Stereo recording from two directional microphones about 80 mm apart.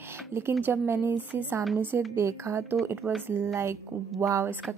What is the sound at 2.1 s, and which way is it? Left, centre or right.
Speech, right.